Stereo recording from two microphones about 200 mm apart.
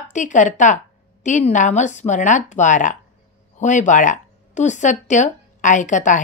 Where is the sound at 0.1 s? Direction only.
40° left (ahead or behind).